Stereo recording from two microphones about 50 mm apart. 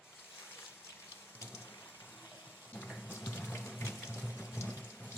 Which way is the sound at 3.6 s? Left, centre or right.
Left.